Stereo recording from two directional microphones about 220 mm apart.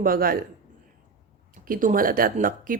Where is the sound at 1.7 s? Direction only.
40° right (ahead or behind).